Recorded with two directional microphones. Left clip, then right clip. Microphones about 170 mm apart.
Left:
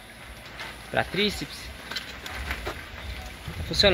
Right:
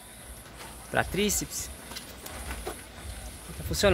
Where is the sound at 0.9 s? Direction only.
15° right (ahead or behind).